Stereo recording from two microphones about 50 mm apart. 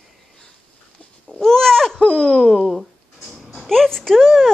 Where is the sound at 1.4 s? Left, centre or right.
Centre.